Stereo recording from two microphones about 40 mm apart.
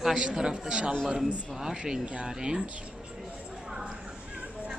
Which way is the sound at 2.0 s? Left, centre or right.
Right.